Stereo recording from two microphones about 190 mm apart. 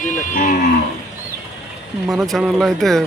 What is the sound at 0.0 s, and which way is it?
Moo, 45° left (ahead or behind).